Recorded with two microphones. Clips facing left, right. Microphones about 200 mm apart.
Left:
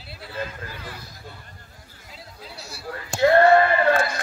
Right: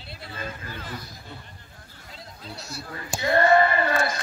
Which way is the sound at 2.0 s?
5° left (ahead or behind).